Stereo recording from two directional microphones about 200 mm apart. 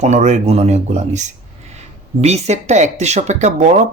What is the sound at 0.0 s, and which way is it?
Speech, 35° right (ahead or behind).